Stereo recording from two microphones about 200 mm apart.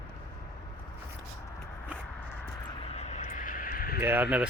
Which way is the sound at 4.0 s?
10° right (ahead or behind).